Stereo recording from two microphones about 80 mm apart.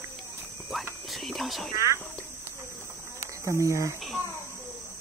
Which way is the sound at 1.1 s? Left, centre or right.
Centre.